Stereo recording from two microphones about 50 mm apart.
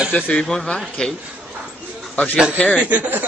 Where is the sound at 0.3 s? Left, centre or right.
Centre.